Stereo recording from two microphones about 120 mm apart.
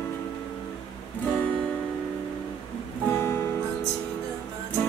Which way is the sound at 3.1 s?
20° left (ahead or behind).